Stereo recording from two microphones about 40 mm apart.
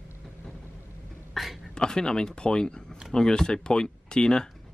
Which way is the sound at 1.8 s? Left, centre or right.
Centre.